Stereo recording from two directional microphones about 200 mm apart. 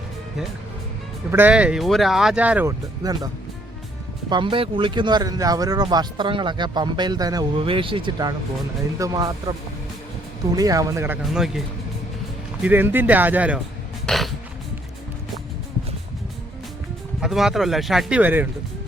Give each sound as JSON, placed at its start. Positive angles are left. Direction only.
{"t": 1.3, "sound": "speech", "side_deg": -10}
{"t": 3.0, "sound": "speech", "side_deg": -20}
{"t": 4.3, "sound": "speech", "side_deg": -25}
{"t": 11.2, "sound": "speech", "side_deg": 0}
{"t": 12.6, "sound": "speech", "side_deg": -10}
{"t": 14.1, "sound": "music", "side_deg": 0}
{"t": 17.2, "sound": "speech", "side_deg": 0}